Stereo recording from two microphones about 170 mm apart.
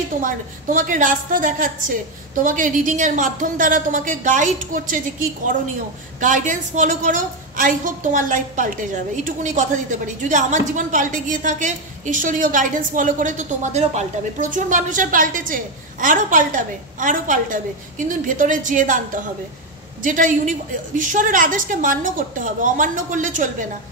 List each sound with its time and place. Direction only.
0.2 s a woman's voice: 50° right (ahead or behind)